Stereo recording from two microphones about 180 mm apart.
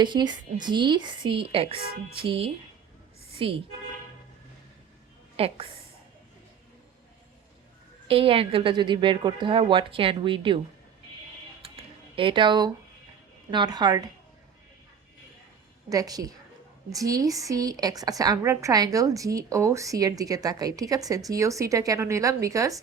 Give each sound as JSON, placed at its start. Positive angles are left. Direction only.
{"t": 0.0, "sound": "a woman's voice", "side_deg": -25}
{"t": 5.4, "sound": "a woman's voice", "side_deg": -30}
{"t": 8.0, "sound": "a woman's voice", "side_deg": -30}
{"t": 11.6, "sound": "a sound", "side_deg": -30}
{"t": 13.5, "sound": "a woman's voice", "side_deg": -25}
{"t": 15.9, "sound": "a woman's voice", "side_deg": -20}